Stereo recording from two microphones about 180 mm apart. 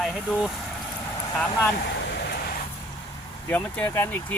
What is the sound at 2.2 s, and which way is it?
Vehicle, 60° left (ahead or behind).